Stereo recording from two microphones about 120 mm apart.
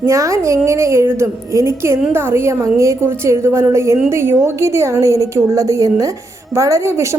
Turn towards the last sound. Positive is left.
turn(degrees=-25)  # may be behind; listen again after turning